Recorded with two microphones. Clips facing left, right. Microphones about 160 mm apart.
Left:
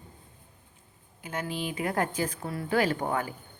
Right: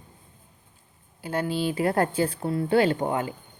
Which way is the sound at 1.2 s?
35° right (ahead or behind).